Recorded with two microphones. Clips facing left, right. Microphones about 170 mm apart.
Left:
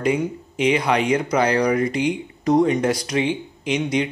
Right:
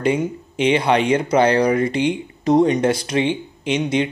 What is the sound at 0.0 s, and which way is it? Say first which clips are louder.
Speech: right 2 dB; 25° right (ahead or behind).